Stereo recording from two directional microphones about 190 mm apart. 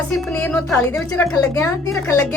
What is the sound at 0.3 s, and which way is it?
A woman's voice, 10° left (ahead or behind).